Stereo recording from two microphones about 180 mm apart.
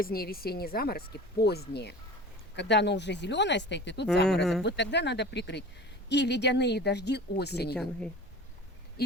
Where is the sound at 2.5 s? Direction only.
75° left (ahead or behind).